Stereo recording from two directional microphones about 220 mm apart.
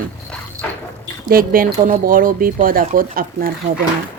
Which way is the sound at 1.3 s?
40° right (ahead or behind).